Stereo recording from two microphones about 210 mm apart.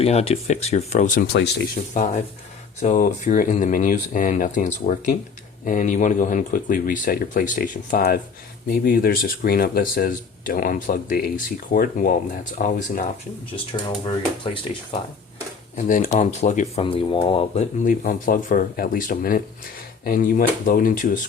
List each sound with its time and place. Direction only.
0.0 s speech: 30° left (ahead or behind)
13.7 s speech: 25° left (ahead or behind)
15.9 s speech: 40° left (ahead or behind)